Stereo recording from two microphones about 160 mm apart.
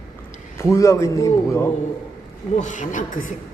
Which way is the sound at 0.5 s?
20° left (ahead or behind).